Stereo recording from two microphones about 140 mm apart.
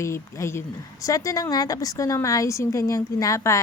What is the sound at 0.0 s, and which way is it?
A woman's voice, 20° left (ahead or behind).